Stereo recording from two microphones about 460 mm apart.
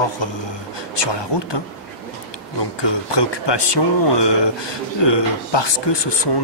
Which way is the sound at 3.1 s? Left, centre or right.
Left.